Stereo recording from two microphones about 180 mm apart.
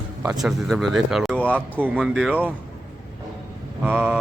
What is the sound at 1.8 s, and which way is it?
Speech, 5° right (ahead or behind).